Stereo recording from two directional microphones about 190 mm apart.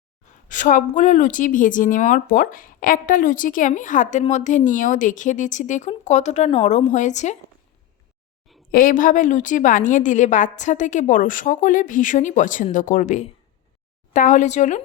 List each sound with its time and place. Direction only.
0.4 s a woman's voice: 40° left (ahead or behind)
8.7 s a woman's voice: 45° left (ahead or behind)